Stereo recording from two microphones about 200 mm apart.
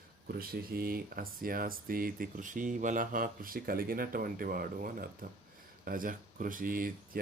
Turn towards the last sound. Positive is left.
turn(degrees=-45)  # may be behind; listen again after turning